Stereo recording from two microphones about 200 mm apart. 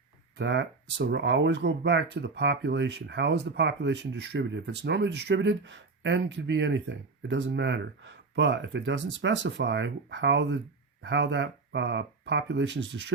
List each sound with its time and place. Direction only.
0.3 s speech: 60° right (ahead or behind)